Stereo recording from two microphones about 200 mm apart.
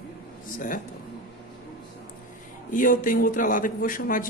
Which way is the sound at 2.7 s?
40° left (ahead or behind).